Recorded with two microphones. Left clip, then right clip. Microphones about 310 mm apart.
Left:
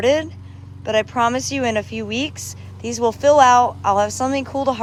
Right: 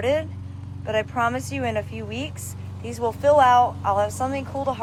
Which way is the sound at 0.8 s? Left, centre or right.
Centre.